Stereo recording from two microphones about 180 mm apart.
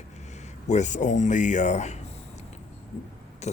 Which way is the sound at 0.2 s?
40° left (ahead or behind).